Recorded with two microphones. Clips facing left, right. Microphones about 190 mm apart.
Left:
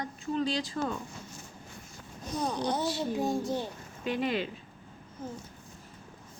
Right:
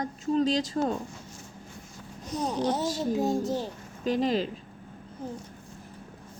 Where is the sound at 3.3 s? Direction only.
40° right (ahead or behind).